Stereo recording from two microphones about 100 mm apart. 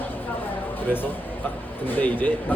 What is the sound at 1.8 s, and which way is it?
Speech, 20° left (ahead or behind).